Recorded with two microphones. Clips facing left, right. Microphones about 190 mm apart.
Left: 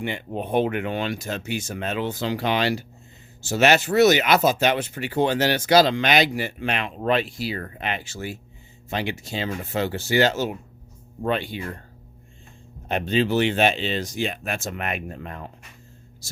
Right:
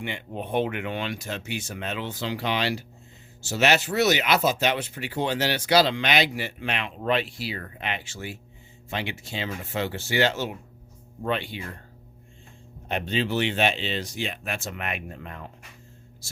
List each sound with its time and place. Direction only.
0.0 s speech: 40° left (ahead or behind)
12.9 s speech: 45° left (ahead or behind)